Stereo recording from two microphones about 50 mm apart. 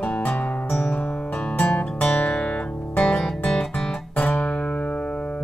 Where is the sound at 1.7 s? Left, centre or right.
Left.